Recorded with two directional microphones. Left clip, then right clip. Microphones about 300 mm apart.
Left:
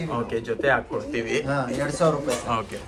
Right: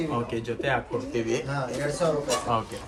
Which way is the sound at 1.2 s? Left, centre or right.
Centre.